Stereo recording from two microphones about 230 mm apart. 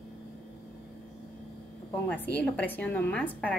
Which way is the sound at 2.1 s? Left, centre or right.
Centre.